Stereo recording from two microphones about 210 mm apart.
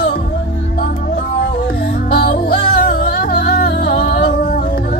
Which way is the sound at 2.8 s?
45° left (ahead or behind).